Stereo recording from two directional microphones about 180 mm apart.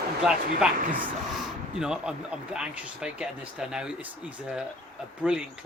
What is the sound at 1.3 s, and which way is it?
Speech, 5° right (ahead or behind).